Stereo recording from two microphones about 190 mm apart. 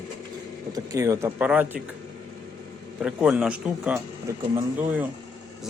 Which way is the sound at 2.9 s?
5° right (ahead or behind).